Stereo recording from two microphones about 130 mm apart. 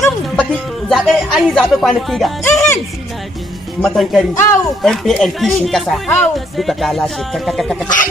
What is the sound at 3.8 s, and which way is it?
Speech, centre (ahead or behind).